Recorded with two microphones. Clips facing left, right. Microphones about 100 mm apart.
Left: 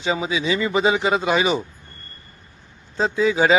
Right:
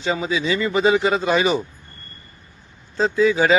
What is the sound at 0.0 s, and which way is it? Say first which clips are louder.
A man's voice: even; 15° left (ahead or behind).